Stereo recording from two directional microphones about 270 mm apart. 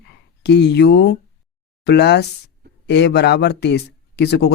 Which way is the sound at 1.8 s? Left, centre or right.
Left.